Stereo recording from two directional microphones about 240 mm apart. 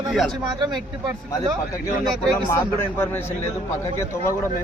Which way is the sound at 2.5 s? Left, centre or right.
Centre.